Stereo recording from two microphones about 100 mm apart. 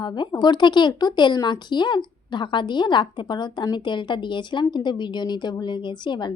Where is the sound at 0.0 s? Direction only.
45° left (ahead or behind).